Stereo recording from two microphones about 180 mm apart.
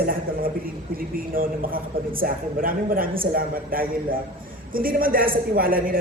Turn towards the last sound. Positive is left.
turn(degrees=-50)  # may be behind; listen again after turning